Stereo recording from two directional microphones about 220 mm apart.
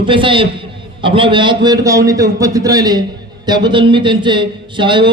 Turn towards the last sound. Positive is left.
turn(degrees=-20)  # may be behind; listen again after turning